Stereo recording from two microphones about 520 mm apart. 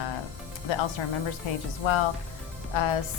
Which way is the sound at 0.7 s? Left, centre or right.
Left.